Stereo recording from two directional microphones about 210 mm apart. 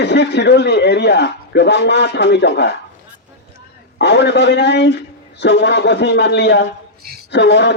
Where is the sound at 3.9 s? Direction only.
55° left (ahead or behind).